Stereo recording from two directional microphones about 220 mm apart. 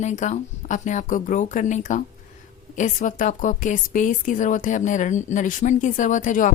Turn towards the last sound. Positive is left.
turn(degrees=35)  # may be behind; listen again after turning